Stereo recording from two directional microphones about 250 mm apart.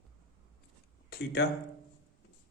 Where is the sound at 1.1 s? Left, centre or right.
Left.